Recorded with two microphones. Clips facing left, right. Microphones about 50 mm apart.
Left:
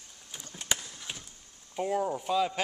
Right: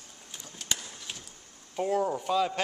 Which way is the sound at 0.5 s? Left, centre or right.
Centre.